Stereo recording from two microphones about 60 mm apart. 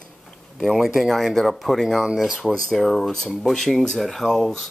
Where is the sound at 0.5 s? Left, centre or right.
Centre.